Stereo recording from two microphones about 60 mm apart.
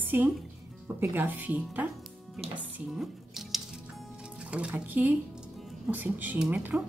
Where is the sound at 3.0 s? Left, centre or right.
Centre.